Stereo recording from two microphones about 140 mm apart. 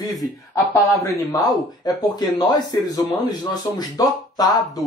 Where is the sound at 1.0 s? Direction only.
25° left (ahead or behind).